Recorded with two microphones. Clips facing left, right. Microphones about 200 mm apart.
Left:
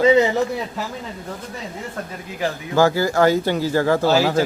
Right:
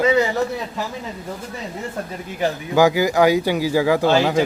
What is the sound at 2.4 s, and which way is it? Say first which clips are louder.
Speech: right 1 dB; 15° right (ahead or behind).